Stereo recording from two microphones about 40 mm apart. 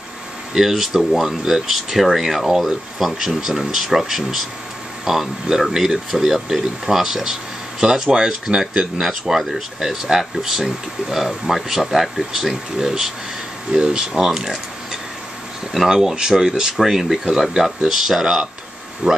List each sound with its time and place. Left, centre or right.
0.6 s speech: centre
19.0 s speech: right